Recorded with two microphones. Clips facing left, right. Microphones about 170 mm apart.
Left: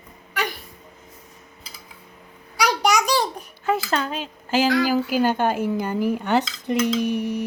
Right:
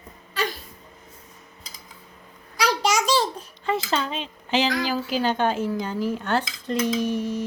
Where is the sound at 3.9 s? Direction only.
5° left (ahead or behind).